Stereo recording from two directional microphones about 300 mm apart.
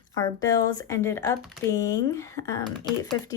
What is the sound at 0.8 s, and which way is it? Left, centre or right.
Speech, centre.